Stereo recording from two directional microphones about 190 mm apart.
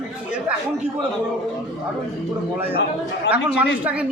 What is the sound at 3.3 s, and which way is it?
Speech, 65° left (ahead or behind).